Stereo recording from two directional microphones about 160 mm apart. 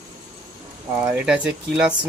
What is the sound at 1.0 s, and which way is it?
Speech, 5° right (ahead or behind).